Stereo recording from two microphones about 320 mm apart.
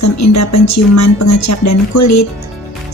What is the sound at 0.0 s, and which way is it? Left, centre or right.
A woman's voice, left.